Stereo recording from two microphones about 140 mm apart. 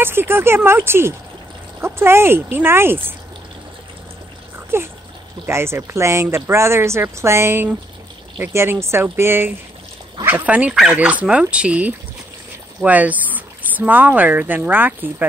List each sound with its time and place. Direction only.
0.0 s speech: 15° right (ahead or behind)
4.7 s speech: 15° right (ahead or behind)